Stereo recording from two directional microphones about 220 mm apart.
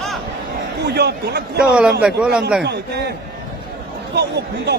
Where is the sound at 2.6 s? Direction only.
50° right (ahead or behind).